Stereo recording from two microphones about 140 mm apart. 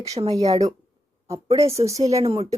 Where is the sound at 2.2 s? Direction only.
45° right (ahead or behind).